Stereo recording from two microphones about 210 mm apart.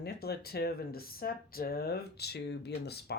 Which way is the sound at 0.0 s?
50° left (ahead or behind).